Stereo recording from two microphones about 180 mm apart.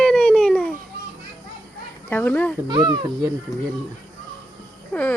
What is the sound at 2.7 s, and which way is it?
Speech, 25° right (ahead or behind).